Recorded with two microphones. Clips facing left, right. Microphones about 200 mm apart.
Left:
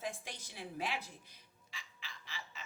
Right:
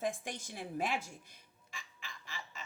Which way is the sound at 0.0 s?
50° right (ahead or behind).